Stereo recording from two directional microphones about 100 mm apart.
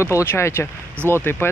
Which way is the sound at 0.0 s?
25° left (ahead or behind).